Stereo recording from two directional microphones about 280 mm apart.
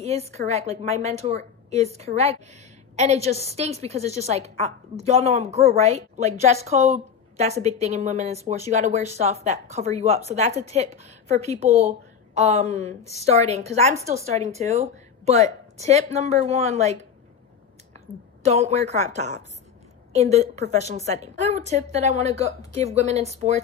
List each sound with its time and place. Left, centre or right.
0.0 s a woman's voice: right